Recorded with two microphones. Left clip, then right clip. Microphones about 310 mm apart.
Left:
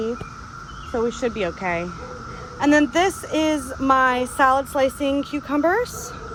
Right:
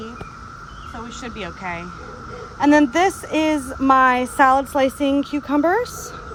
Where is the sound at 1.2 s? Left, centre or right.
Centre.